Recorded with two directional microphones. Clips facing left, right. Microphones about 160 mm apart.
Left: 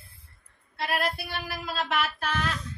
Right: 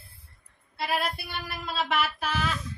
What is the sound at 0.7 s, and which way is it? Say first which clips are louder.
Speech: even; centre (ahead or behind).